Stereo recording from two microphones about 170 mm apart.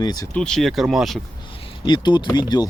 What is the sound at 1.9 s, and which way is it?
Speech, 25° left (ahead or behind).